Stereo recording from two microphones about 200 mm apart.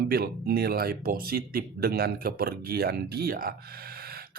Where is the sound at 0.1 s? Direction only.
50° right (ahead or behind).